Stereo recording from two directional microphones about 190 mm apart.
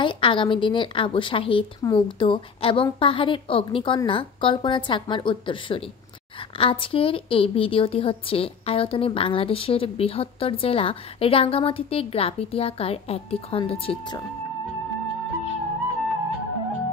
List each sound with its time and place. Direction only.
0.0 s a woman's voice: 25° left (ahead or behind)